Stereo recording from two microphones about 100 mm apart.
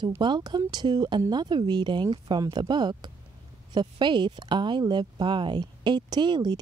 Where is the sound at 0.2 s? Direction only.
45° right (ahead or behind).